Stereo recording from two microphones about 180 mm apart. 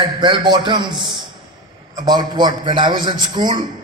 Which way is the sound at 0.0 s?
25° right (ahead or behind).